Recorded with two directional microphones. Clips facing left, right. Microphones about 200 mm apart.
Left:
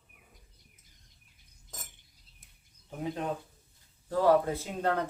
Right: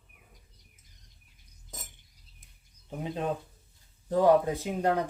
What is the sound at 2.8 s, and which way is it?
Speech, 20° right (ahead or behind).